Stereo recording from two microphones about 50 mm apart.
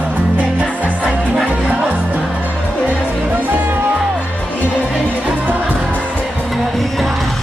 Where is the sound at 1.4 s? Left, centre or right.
Right.